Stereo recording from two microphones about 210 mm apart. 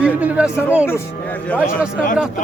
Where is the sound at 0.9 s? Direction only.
10° left (ahead or behind).